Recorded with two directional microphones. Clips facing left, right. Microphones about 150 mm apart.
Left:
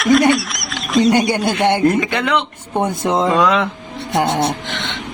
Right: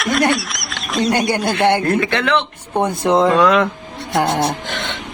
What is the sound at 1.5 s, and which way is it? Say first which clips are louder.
Speech: left 1 dB; 15° left (ahead or behind).